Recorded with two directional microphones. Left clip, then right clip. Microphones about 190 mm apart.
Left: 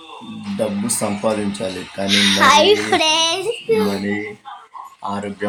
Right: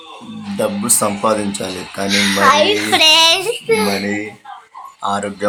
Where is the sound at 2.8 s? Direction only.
35° left (ahead or behind).